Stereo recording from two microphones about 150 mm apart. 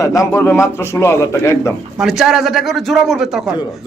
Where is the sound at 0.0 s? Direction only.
20° left (ahead or behind).